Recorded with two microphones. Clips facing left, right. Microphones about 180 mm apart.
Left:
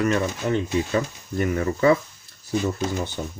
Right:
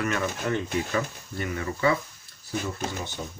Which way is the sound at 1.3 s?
45° left (ahead or behind).